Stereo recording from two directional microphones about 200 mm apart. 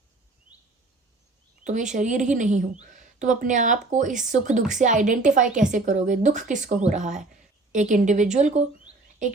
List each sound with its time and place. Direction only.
1.6 s a woman's voice: 40° right (ahead or behind)